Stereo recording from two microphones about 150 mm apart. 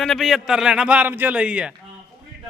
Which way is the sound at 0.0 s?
Centre (ahead or behind).